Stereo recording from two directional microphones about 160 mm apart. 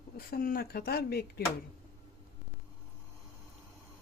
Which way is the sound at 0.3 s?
65° left (ahead or behind).